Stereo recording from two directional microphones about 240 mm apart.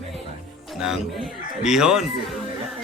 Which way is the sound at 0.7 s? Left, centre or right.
Centre.